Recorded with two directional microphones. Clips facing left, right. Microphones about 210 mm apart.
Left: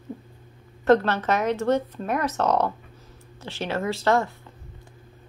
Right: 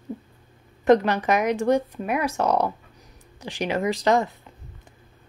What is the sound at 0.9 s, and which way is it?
Speech, 15° right (ahead or behind).